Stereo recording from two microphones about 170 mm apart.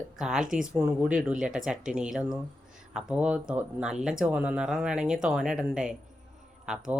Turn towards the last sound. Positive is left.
turn(degrees=-5)  # may be behind; listen again after turning